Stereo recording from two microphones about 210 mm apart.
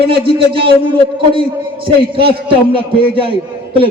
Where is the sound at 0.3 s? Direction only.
25° right (ahead or behind).